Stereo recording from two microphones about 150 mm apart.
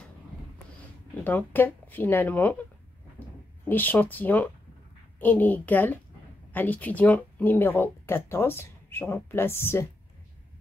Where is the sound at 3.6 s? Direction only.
10° left (ahead or behind).